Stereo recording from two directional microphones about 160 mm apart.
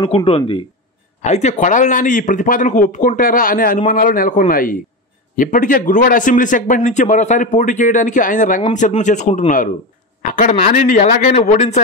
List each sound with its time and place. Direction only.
0.0 s speech: 35° left (ahead or behind)
1.2 s a man's voice: 45° left (ahead or behind)